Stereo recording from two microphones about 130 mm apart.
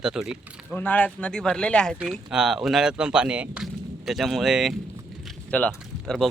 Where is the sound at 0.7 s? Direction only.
10° left (ahead or behind).